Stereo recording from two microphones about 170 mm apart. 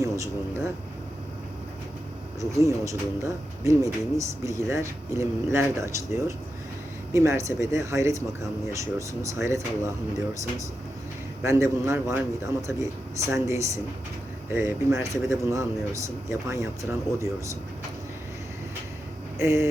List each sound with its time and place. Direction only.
0.0 s speech: 15° right (ahead or behind)
2.4 s speech: 20° right (ahead or behind)
11.4 s speech: 15° right (ahead or behind)
19.4 s speech: 15° right (ahead or behind)